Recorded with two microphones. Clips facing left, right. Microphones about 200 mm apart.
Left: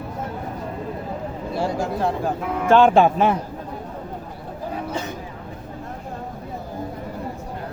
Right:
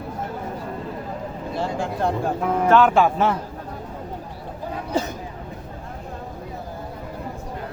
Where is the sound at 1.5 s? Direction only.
5° left (ahead or behind).